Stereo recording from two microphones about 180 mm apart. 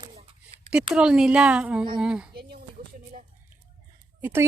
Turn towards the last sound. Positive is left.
turn(degrees=-15)  # may be behind; listen again after turning